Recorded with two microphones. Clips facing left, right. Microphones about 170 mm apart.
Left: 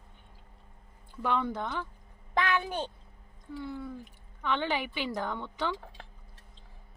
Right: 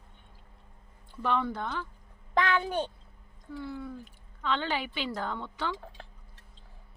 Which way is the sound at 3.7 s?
15° left (ahead or behind).